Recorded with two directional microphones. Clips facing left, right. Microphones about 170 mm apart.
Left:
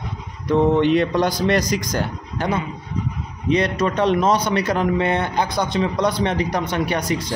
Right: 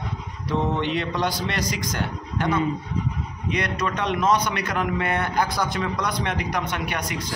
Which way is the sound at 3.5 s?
30° left (ahead or behind).